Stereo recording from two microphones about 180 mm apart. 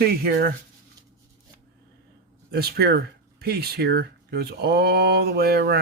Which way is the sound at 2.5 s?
60° right (ahead or behind).